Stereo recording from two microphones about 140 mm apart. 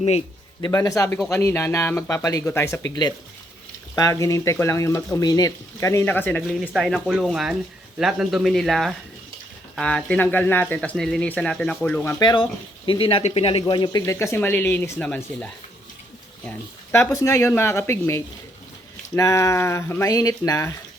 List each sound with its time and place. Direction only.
0.6 s speech: 25° left (ahead or behind)
6.4 s speech: centre (ahead or behind); by 10.8 s 15° left (ahead or behind)
10.8 s speech: 5° left (ahead or behind)
12.2 s speech: 35° left (ahead or behind)
14.0 s speech: 20° left (ahead or behind)
16.5 s speech: 15° left (ahead or behind)